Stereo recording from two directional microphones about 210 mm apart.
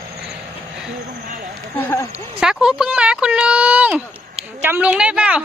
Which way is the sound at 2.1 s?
5° right (ahead or behind).